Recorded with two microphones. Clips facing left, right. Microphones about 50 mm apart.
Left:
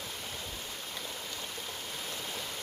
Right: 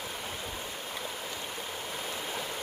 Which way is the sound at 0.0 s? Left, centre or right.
Centre.